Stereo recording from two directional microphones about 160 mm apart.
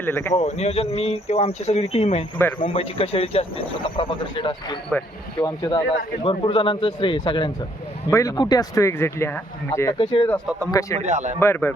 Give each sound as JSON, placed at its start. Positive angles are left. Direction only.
{"t": 0.0, "sound": "speech", "side_deg": 15}
{"t": 0.3, "sound": "speech", "side_deg": 45}
{"t": 2.6, "sound": "speech", "side_deg": 35}
{"t": 11.0, "sound": "speech", "side_deg": -45}
{"t": 11.3, "sound": "speech", "side_deg": 15}